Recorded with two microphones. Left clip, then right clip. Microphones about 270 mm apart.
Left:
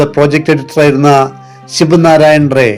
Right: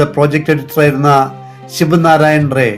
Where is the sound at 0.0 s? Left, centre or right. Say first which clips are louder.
Left 3 dB; left.